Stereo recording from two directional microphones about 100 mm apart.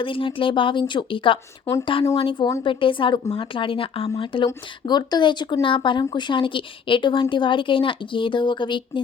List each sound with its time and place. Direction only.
0.0 s a woman's voice: 60° left (ahead or behind)
4.4 s a woman's voice: 45° left (ahead or behind)